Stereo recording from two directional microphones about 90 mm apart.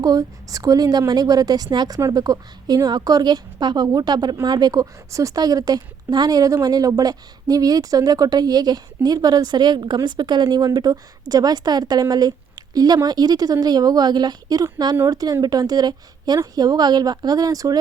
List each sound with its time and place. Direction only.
0.0 s a woman's voice: 40° right (ahead or behind)